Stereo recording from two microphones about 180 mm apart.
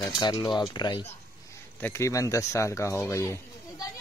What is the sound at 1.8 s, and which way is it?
Speech, 15° left (ahead or behind).